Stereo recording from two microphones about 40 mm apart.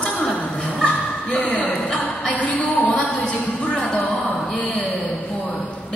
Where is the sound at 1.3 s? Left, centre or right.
Left.